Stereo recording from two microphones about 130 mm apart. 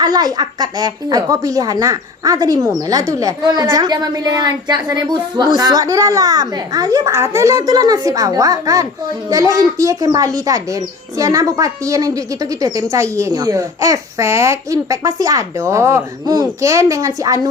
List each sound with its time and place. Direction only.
0.0 s speech: 30° right (ahead or behind)